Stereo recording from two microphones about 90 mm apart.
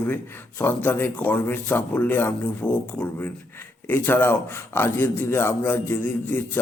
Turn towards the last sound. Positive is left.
turn(degrees=20)  # may be behind; listen again after turning